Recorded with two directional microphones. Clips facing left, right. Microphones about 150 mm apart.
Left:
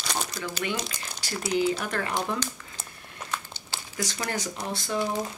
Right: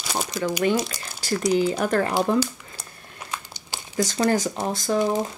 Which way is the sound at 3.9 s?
35° right (ahead or behind).